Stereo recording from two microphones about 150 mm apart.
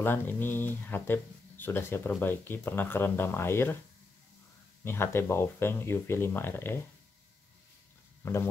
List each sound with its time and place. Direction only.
0.0 s speech: 15° left (ahead or behind)
4.8 s speech: 15° left (ahead or behind)
8.2 s speech: 15° left (ahead or behind)